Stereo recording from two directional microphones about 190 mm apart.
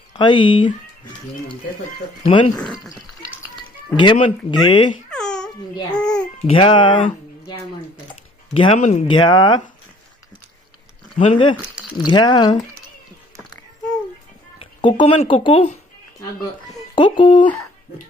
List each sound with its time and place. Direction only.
0.1 s speech: 25° left (ahead or behind)
2.2 s speech: 25° left (ahead or behind)
2.6 s speech: 5° left (ahead or behind)
3.9 s speech: 25° left (ahead or behind)
5.1 s babbling: 5° left (ahead or behind)
6.5 s speech: 25° left (ahead or behind)
8.5 s speech: 30° left (ahead or behind)
9.0 s speech: 25° left (ahead or behind)
11.2 s speech: 25° left (ahead or behind)
14.6 s speech: 25° left (ahead or behind)
16.9 s speech: 25° left (ahead or behind)